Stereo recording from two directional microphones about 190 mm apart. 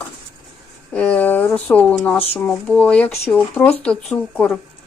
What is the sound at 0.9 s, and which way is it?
Speech, 10° left (ahead or behind).